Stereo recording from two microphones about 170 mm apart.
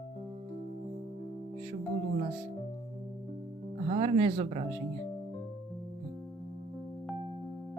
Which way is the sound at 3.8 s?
35° right (ahead or behind).